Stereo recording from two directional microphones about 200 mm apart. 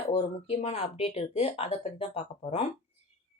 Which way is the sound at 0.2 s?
35° left (ahead or behind).